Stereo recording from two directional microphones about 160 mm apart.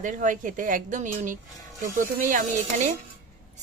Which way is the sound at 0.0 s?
55° right (ahead or behind).